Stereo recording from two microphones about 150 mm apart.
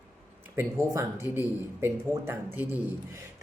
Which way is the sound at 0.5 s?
20° right (ahead or behind).